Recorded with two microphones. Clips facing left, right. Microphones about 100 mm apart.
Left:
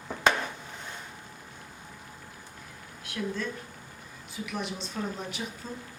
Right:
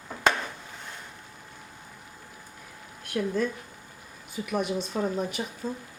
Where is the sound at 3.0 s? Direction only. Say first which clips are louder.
Right 6 dB; 50° right (ahead or behind).